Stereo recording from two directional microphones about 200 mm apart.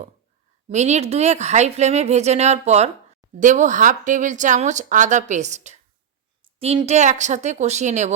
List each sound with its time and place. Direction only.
0.7 s a woman's voice: 35° right (ahead or behind)